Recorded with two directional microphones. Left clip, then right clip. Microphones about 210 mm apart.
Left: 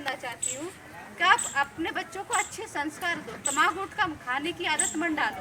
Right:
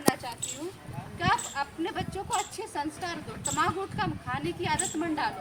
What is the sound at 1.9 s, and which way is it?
A woman's voice, 10° left (ahead or behind).